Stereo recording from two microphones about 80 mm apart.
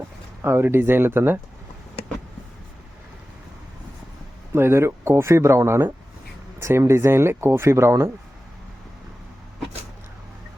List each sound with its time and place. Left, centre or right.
0.4 s speech: right
4.5 s speech: right